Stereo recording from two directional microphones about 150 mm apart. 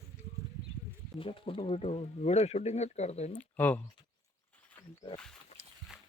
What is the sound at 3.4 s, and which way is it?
Speech, 10° left (ahead or behind).